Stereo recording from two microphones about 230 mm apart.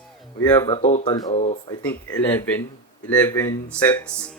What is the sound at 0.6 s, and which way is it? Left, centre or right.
Speech, left.